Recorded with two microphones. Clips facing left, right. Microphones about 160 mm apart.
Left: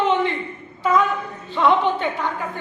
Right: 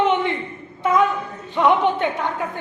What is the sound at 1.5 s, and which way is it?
Speech, 15° right (ahead or behind).